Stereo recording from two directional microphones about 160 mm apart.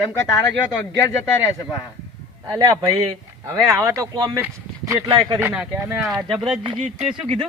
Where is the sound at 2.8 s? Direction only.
20° right (ahead or behind); by 6.6 s centre (ahead or behind).